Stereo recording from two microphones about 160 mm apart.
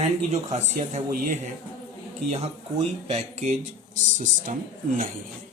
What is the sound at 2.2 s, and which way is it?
Speech, 40° right (ahead or behind).